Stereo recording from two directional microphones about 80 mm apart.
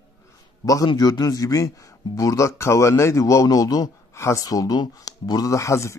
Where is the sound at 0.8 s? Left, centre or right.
Left.